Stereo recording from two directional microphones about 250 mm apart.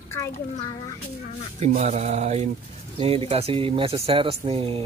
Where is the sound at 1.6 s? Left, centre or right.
Right.